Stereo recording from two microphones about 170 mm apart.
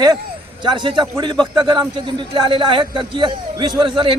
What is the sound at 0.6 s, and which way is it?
A man's voice, 25° right (ahead or behind).